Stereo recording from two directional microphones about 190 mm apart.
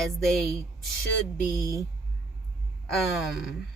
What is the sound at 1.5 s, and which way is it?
Speech, 15° right (ahead or behind).